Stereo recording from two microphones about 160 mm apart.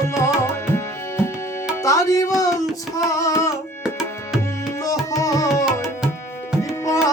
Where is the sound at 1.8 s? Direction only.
20° left (ahead or behind).